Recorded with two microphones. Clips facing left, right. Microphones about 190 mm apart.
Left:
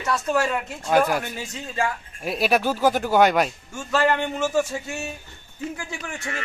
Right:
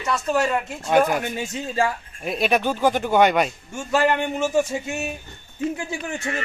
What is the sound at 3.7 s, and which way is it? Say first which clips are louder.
Speech: right 1 dB; 15° right (ahead or behind).